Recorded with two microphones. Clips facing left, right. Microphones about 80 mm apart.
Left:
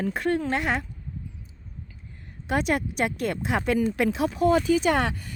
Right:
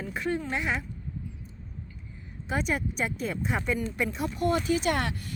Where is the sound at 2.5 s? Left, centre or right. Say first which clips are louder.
Left 5 dB; left.